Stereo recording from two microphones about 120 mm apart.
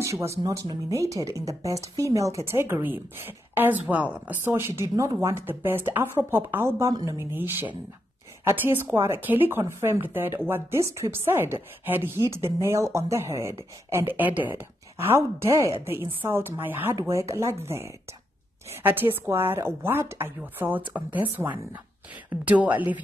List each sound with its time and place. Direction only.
0.0 s speech: 25° right (ahead or behind)
8.5 s a woman's voice: 20° right (ahead or behind)
22.5 s a woman's voice: 15° right (ahead or behind)